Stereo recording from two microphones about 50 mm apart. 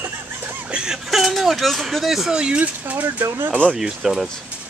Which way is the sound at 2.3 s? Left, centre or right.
Right.